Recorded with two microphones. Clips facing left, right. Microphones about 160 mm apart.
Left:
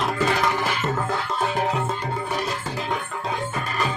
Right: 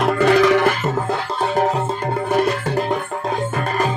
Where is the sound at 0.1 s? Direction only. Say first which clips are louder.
Right 9 dB; 65° right (ahead or behind).